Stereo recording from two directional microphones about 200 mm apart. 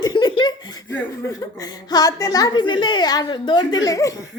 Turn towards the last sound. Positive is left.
turn(degrees=15)  # may be behind; listen again after turning